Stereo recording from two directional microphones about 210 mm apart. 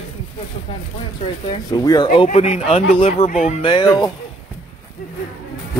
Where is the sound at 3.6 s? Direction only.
20° left (ahead or behind).